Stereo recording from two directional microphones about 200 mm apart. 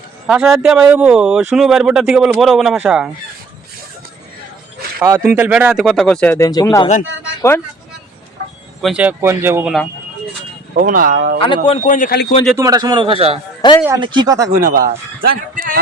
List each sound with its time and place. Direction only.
0.3 s a man's voice: 5° right (ahead or behind)
5.0 s a man's voice: 10° right (ahead or behind); by 6.8 s 20° left (ahead or behind)
8.8 s speech: 5° right (ahead or behind)
10.8 s speech: 45° right (ahead or behind)
11.4 s speech: 25° left (ahead or behind)
11.8 s speech: 40° left (ahead or behind)
12.5 s a man's voice: 20° right (ahead or behind)
13.6 s speech: 20° left (ahead or behind)
14.0 s a man's voice: 25° right (ahead or behind)
14.6 s speech: 45° right (ahead or behind)